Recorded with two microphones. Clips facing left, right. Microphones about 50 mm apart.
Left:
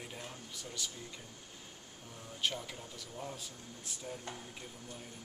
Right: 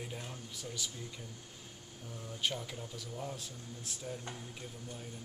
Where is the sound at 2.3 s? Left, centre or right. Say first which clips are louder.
Even; centre.